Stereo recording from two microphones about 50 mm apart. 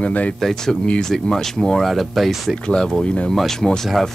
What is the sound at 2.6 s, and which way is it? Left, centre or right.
Speech, centre.